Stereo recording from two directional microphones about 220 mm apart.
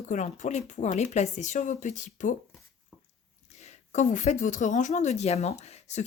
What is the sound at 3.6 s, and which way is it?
Speech, 30° left (ahead or behind).